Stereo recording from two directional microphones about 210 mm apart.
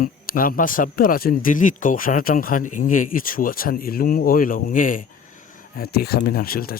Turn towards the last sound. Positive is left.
turn(degrees=45)  # may be behind; listen again after turning